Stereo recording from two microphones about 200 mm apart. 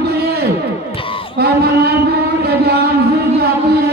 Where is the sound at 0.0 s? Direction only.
55° right (ahead or behind).